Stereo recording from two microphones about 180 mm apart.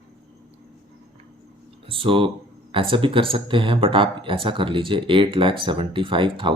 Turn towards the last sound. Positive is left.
turn(degrees=-30)  # may be behind; listen again after turning